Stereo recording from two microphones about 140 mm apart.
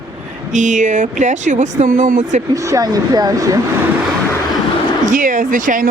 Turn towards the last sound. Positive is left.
turn(degrees=-75)  # may be behind; listen again after turning